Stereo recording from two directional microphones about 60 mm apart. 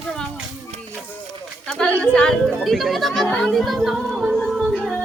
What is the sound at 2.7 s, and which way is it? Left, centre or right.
Speech, centre.